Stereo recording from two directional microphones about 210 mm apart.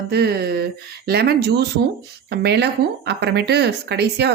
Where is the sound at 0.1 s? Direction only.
50° right (ahead or behind).